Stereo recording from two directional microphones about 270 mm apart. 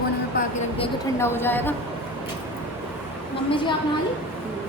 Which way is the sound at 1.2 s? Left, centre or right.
Centre.